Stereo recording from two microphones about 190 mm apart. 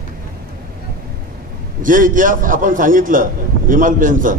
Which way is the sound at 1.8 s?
45° right (ahead or behind).